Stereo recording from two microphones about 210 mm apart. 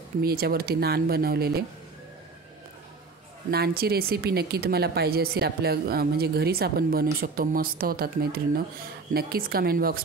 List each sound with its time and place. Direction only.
0.2 s speech: 45° right (ahead or behind)
3.4 s speech: 50° right (ahead or behind)